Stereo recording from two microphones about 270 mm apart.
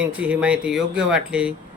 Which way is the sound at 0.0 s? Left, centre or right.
Centre.